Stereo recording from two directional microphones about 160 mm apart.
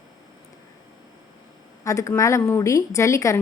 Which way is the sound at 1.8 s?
20° left (ahead or behind).